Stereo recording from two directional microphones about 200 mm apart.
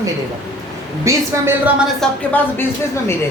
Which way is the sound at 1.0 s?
15° right (ahead or behind).